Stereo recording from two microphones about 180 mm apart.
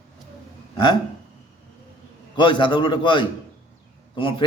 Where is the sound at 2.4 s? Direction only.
25° left (ahead or behind).